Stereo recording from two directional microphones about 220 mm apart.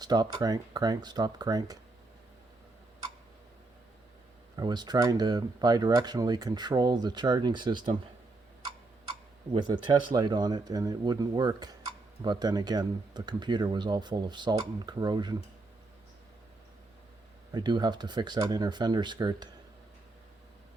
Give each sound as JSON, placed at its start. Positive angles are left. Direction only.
{"t": 0.0, "sound": "speech", "side_deg": -20}
{"t": 4.5, "sound": "speech", "side_deg": -20}
{"t": 9.5, "sound": "speech", "side_deg": -20}
{"t": 17.5, "sound": "speech", "side_deg": -20}